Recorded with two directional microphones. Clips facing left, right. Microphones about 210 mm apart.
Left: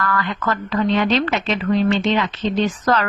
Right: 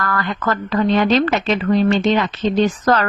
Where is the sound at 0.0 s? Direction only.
40° right (ahead or behind).